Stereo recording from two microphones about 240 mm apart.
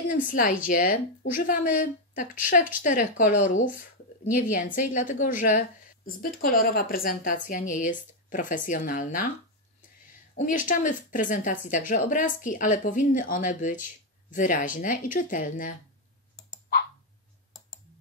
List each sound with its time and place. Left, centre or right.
0.1 s speech: left
10.3 s speech: left